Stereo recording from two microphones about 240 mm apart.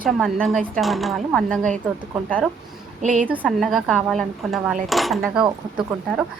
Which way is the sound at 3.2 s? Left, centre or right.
Centre.